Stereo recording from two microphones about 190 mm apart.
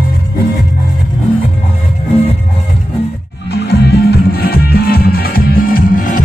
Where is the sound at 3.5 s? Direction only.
60° left (ahead or behind).